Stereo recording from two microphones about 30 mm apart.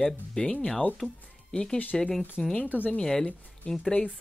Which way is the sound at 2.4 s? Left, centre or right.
Left.